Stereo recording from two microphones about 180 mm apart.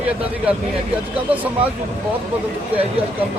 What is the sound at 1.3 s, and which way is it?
Speech, 10° right (ahead or behind).